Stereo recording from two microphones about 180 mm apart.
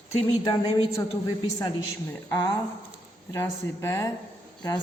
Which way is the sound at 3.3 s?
15° left (ahead or behind).